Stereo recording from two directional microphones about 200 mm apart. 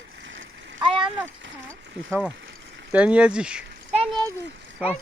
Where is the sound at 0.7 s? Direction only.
25° right (ahead or behind).